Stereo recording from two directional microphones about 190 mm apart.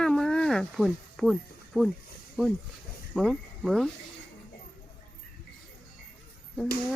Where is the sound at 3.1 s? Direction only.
Centre (ahead or behind).